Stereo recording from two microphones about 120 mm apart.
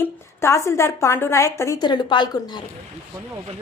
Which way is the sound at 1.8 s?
40° left (ahead or behind).